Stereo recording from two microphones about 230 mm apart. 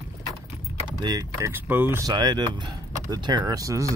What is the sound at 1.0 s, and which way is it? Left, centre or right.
Speech, centre.